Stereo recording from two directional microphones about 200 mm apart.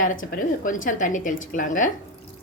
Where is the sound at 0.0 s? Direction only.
45° left (ahead or behind).